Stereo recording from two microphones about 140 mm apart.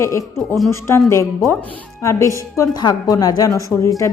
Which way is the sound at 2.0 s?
20° left (ahead or behind).